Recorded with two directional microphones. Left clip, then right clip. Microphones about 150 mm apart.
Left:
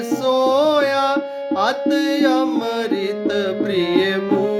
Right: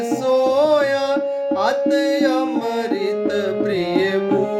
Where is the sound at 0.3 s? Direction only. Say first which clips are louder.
Even; 30° left (ahead or behind).